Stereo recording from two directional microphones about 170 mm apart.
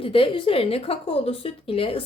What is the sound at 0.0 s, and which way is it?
A woman's voice, 30° left (ahead or behind).